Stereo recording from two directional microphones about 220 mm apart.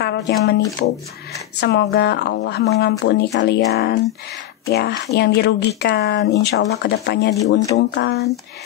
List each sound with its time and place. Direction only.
0.0 s speech: 50° left (ahead or behind)